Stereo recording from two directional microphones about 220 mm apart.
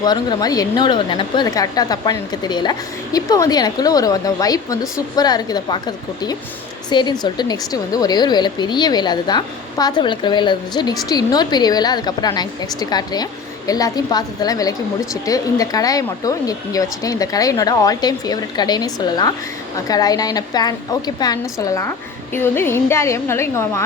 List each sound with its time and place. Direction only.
0.0 s a woman's voice: 20° left (ahead or behind)
6.9 s a woman's voice: 20° left (ahead or behind)